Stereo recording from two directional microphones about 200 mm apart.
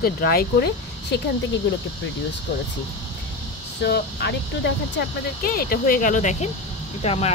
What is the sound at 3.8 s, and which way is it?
A woman's voice, 55° left (ahead or behind).